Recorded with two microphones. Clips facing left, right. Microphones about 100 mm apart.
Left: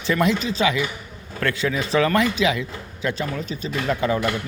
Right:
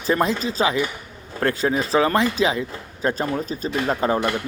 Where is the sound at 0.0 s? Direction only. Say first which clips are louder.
Even; 35° right (ahead or behind).